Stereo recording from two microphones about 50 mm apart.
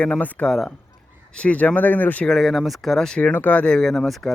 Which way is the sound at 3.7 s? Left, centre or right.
Centre.